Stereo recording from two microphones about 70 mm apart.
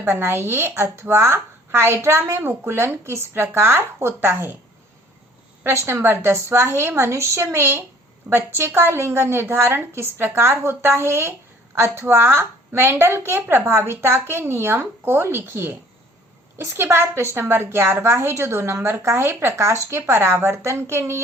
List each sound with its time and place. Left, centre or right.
0.1 s a woman's voice: right
5.6 s a woman's voice: right